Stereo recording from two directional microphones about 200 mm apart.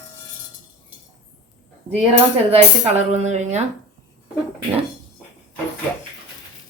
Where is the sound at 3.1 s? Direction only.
35° right (ahead or behind).